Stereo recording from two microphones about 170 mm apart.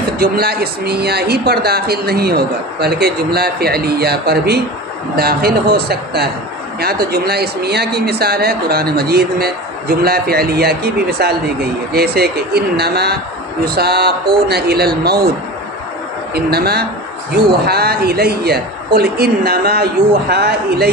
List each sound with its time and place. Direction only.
0.2 s speech: 65° right (ahead or behind)
16.3 s speech: 70° right (ahead or behind)